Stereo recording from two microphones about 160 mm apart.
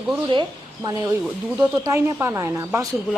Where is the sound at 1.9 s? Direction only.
15° right (ahead or behind).